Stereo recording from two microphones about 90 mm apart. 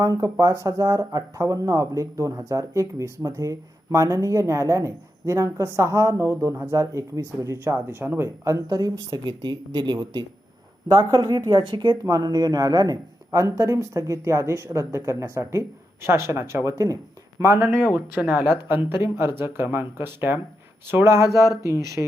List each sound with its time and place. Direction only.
0.0 s speech: 40° right (ahead or behind)
8.4 s a woman's voice: 40° right (ahead or behind)
10.8 s a woman's voice: 45° right (ahead or behind)
11.5 s speech: 60° right (ahead or behind)
12.0 s speech: 40° right (ahead or behind)
17.7 s speech: 20° right (ahead or behind); by 22.0 s 35° right (ahead or behind)